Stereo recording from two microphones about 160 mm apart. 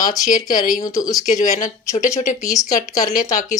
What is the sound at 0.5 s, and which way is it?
Speech, 55° left (ahead or behind).